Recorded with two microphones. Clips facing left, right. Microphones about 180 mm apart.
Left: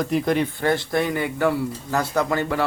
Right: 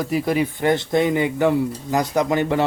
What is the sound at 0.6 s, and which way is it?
Speech, 20° right (ahead or behind).